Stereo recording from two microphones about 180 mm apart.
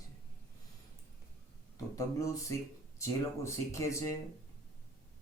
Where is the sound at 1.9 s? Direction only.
15° left (ahead or behind).